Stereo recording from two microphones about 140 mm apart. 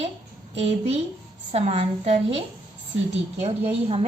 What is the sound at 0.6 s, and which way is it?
A woman's voice, 50° right (ahead or behind).